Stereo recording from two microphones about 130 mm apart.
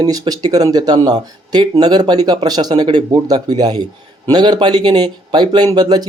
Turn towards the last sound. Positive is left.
turn(degrees=-30)  # may be behind; listen again after turning